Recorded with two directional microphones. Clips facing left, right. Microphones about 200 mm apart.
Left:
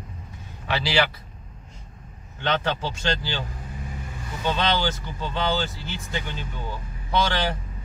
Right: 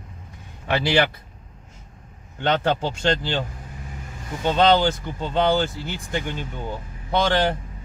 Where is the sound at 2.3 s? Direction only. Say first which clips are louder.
Right 4 dB; 50° right (ahead or behind).